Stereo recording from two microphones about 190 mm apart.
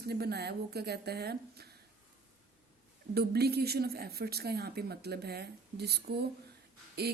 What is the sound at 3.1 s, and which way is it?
Speech, 55° right (ahead or behind).